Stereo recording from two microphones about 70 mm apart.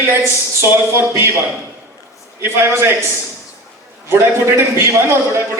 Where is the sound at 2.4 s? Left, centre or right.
Right.